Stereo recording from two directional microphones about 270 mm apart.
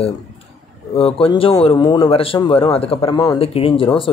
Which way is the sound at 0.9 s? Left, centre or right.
Left.